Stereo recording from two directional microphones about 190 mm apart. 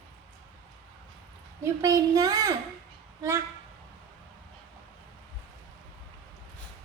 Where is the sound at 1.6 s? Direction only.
15° right (ahead or behind).